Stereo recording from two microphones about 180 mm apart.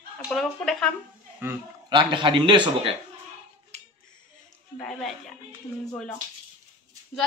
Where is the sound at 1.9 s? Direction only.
25° right (ahead or behind).